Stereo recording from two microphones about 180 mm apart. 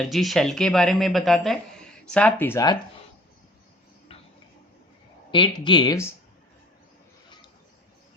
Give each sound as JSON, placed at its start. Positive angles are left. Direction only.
{"t": 0.0, "sound": "speech", "side_deg": 0}
{"t": 4.1, "sound": "tick-tock", "side_deg": 30}
{"t": 5.3, "sound": "speech", "side_deg": 25}